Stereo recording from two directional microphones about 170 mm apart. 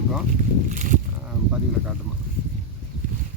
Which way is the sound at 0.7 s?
50° right (ahead or behind).